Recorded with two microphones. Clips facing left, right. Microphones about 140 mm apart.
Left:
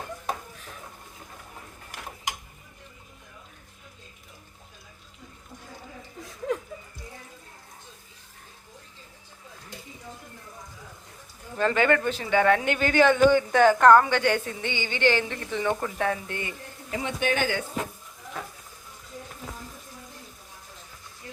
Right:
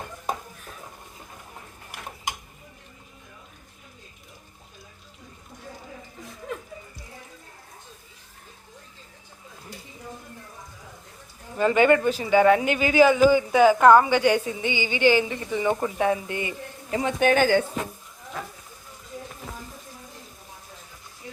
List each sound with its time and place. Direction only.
11.5 s speech: 10° right (ahead or behind)
16.9 s speech: 45° right (ahead or behind)